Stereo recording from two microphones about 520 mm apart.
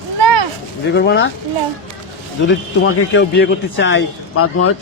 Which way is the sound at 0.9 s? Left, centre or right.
Centre.